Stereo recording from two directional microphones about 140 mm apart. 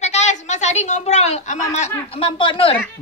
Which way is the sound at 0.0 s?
55° left (ahead or behind).